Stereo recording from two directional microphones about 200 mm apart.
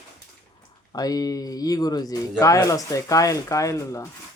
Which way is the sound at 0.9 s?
20° left (ahead or behind).